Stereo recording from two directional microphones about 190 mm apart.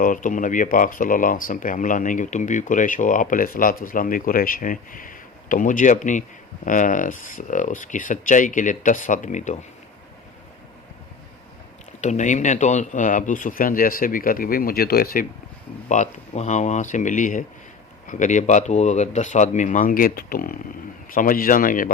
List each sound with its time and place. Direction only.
0.0 s speech: 45° left (ahead or behind)
11.9 s speech: 40° left (ahead or behind)
15.9 s speech: 40° left (ahead or behind)